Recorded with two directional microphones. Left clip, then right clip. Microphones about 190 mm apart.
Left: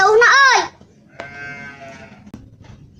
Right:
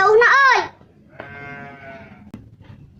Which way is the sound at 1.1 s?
45° left (ahead or behind).